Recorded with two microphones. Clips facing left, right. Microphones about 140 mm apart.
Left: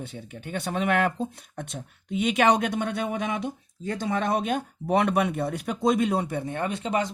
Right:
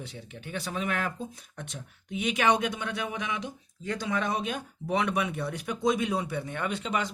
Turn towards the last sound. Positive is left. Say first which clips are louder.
# left 4 dB
turn(degrees=40)  # may be behind; listen again after turning